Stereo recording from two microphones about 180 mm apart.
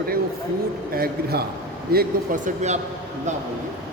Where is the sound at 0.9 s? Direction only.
60° right (ahead or behind); by 2.7 s 40° right (ahead or behind).